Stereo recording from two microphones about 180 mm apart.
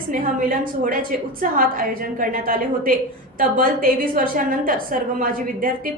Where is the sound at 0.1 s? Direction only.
50° right (ahead or behind).